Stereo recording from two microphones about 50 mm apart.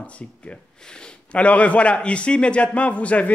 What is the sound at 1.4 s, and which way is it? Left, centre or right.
Speech, left.